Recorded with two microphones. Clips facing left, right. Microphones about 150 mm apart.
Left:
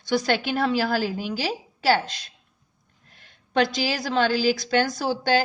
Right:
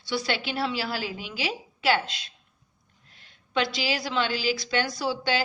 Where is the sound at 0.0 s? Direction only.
45° left (ahead or behind).